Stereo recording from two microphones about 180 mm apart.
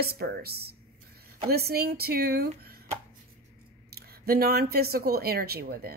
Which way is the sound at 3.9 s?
60° right (ahead or behind).